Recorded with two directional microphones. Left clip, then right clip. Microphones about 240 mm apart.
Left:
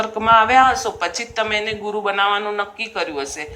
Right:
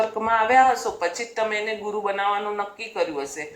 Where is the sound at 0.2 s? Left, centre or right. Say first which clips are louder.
Left 6 dB; left.